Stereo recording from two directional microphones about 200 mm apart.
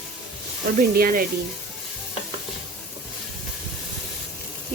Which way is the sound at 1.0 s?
45° right (ahead or behind).